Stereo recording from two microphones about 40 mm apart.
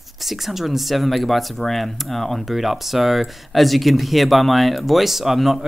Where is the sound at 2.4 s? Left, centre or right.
Centre.